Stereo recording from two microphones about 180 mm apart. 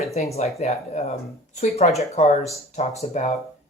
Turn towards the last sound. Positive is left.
turn(degrees=40)  # may be behind; listen again after turning